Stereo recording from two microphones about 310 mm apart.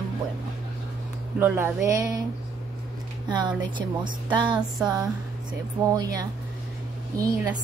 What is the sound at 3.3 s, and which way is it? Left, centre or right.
Speech, centre.